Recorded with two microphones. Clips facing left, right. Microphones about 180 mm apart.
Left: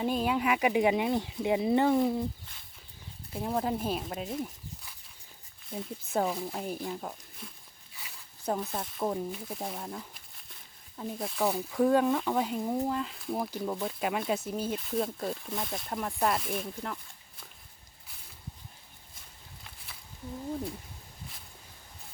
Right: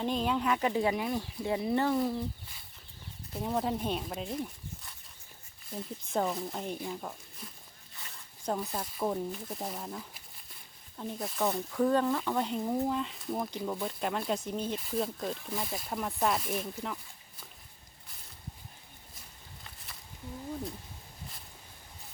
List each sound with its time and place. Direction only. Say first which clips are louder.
0.0 s speech: left 2 dB; 10° left (ahead or behind)
3.3 s speech: left 1 dB; centre (ahead or behind)
19.6 s a sound: even; centre (ahead or behind)